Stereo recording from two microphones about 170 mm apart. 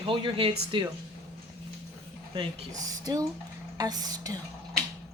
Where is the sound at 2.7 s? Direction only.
20° right (ahead or behind).